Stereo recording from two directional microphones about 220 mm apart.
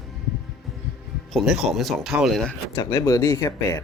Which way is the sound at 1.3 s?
Centre (ahead or behind).